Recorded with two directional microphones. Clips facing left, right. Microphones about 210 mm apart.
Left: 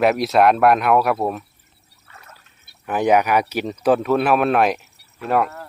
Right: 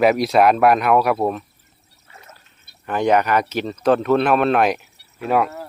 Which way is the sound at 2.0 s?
25° right (ahead or behind).